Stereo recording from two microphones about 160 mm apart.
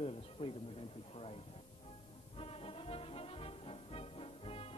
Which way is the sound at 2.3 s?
35° left (ahead or behind).